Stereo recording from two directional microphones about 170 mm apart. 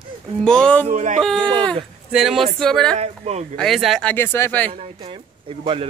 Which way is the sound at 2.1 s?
5° right (ahead or behind).